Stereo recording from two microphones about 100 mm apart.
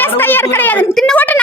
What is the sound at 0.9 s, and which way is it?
Speech, 5° left (ahead or behind).